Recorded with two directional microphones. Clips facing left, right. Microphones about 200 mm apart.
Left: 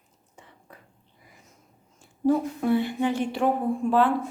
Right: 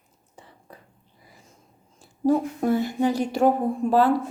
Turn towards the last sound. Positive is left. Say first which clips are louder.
# right 2 dB
turn(degrees=-40)  # may be behind; listen again after turning